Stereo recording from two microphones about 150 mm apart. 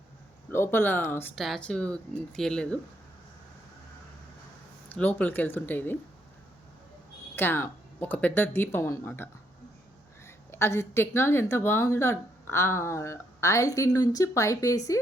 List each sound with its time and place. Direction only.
0.5 s a woman's voice: 15° left (ahead or behind)
4.9 s a woman's voice: 10° left (ahead or behind)
7.3 s a woman's voice: 15° left (ahead or behind)